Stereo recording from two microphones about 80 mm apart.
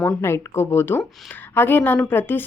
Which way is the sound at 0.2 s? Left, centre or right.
Left.